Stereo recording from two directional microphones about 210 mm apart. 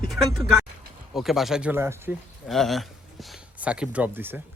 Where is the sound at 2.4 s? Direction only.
Centre (ahead or behind).